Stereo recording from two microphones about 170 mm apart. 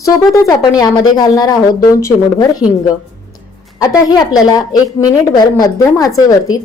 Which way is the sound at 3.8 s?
20° left (ahead or behind).